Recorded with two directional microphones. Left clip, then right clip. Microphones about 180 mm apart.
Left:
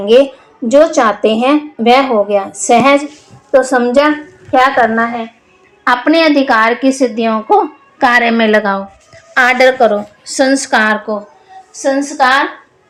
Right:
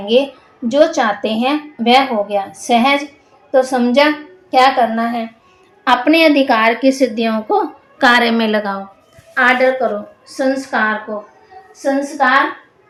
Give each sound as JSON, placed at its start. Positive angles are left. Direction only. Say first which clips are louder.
{"t": 0.0, "sound": "a woman's voice", "louder": "left 6 dB", "side_deg": 15}
{"t": 8.3, "sound": "a woman's voice", "louder": "left 6 dB", "side_deg": 35}
{"t": 9.3, "sound": "a woman's voice", "louder": "left 4 dB", "side_deg": 60}